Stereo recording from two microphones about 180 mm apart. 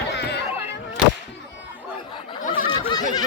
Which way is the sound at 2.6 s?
25° left (ahead or behind).